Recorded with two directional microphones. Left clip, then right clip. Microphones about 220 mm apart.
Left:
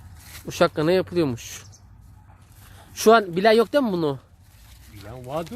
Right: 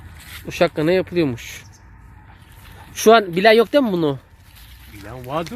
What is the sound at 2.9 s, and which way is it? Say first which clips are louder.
Speech: right 4 dB; centre (ahead or behind).